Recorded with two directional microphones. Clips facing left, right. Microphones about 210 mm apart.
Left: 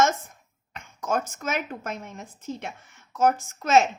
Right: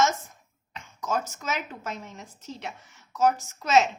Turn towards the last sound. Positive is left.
turn(degrees=50)  # may be behind; listen again after turning